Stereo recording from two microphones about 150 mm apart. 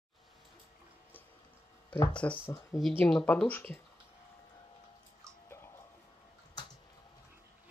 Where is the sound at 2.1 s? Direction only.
5° left (ahead or behind).